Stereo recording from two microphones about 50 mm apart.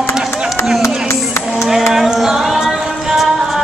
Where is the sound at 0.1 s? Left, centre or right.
Centre.